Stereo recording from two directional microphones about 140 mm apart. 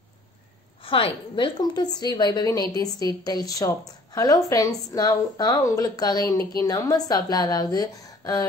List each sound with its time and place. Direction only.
0.8 s a woman's voice: 40° left (ahead or behind)